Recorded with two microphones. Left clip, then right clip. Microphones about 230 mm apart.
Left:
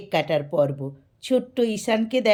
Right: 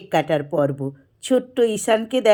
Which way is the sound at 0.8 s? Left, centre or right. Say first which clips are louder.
Right 5 dB; right.